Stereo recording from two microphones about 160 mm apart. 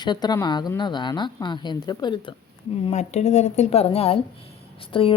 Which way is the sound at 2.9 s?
45° left (ahead or behind).